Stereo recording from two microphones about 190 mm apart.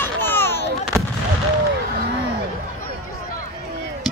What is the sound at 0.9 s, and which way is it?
Fireworks, 5° left (ahead or behind).